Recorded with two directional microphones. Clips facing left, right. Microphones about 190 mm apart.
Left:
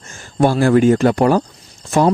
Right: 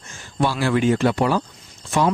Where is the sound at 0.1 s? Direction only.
45° left (ahead or behind).